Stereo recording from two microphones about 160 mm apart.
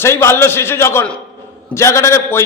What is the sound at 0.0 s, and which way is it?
A man's voice, 15° left (ahead or behind).